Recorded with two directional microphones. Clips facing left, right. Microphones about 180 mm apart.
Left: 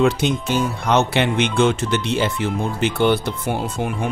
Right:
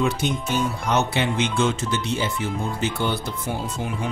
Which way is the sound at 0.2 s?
90° left.